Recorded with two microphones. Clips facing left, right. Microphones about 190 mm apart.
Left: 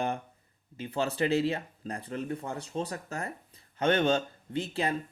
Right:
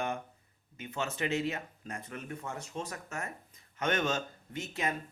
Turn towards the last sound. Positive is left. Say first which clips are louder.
# left 5 dB
turn(degrees=30)  # may be behind; listen again after turning